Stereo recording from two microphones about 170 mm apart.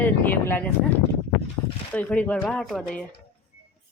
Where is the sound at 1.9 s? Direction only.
10° left (ahead or behind).